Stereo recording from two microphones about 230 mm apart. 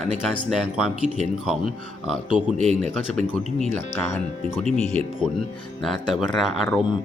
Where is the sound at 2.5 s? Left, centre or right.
Right.